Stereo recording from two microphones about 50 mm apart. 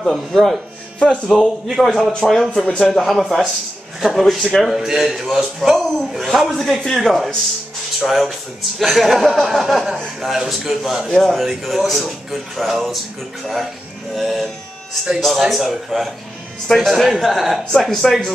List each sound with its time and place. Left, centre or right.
0.1 s a man's voice: centre
0.9 s speech: centre
1.3 s a man's voice: centre
14.1 s a man's voice: centre